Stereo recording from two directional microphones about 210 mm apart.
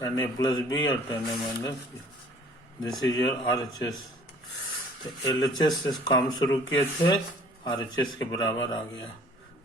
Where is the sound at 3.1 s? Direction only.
15° left (ahead or behind).